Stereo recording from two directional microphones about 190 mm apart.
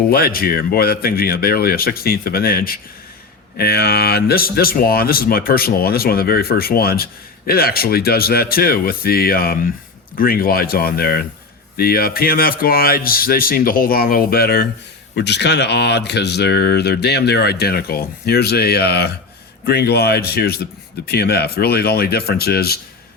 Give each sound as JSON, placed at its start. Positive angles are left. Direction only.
{"t": 0.1, "sound": "speech", "side_deg": 50}